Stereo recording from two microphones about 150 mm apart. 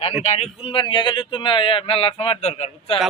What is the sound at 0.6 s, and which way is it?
A man's voice, 35° left (ahead or behind).